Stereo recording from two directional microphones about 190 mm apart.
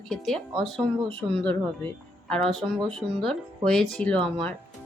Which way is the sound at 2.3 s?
Centre (ahead or behind).